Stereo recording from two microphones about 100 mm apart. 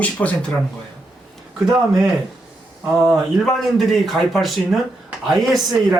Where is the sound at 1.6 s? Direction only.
5° right (ahead or behind).